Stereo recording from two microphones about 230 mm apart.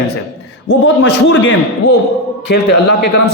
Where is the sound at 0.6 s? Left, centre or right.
Left.